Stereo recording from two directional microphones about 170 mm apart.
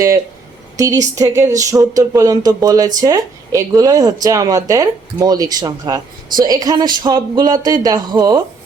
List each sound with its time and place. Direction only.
0.8 s speech: 20° right (ahead or behind)